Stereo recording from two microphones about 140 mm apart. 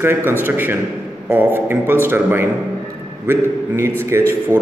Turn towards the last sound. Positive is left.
turn(degrees=-20)  # may be behind; listen again after turning